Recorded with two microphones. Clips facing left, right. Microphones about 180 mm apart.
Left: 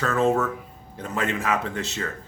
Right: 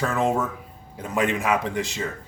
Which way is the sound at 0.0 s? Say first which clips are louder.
Left 2 dB; 15° right (ahead or behind).